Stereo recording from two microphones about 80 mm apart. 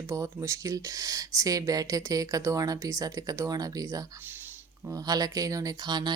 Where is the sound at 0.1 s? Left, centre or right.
Right.